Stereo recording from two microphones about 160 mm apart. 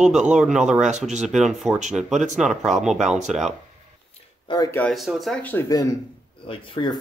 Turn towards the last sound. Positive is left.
turn(degrees=30)  # may be behind; listen again after turning